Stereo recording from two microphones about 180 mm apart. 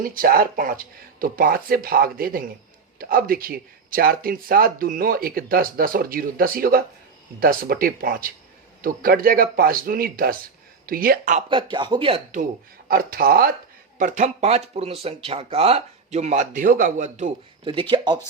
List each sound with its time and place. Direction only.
0.0 s speech: 55° right (ahead or behind)
11.3 s speech: 30° right (ahead or behind)
12.9 s speech: 55° right (ahead or behind)
14.0 s speech: 45° right (ahead or behind)
17.6 s speech: 30° right (ahead or behind)